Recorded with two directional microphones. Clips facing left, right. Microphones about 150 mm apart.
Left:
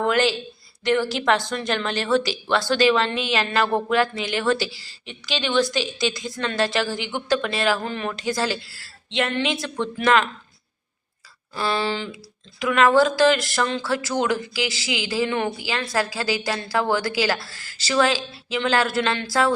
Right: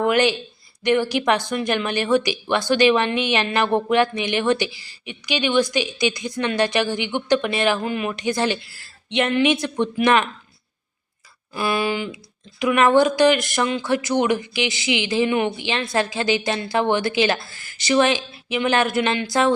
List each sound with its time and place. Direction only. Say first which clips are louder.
0.0 s a woman's voice: right 2 dB; 15° right (ahead or behind)
11.5 s a woman's voice: right 2 dB; 15° right (ahead or behind)